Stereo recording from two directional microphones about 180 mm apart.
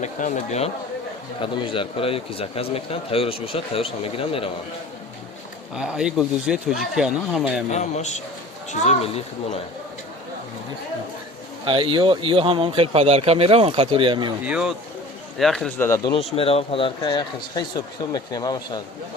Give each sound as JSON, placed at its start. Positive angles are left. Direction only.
{"t": 0.0, "sound": "a man's voice", "side_deg": 40}
{"t": 1.4, "sound": "a man's voice", "side_deg": 30}
{"t": 5.7, "sound": "speech", "side_deg": -5}
{"t": 7.7, "sound": "a man's voice", "side_deg": 40}
{"t": 11.6, "sound": "speech", "side_deg": -30}
{"t": 14.4, "sound": "speech", "side_deg": -5}
{"t": 16.3, "sound": "speech", "side_deg": 35}